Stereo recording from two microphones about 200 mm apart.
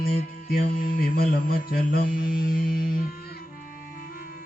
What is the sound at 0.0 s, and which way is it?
Mantra, 50° left (ahead or behind).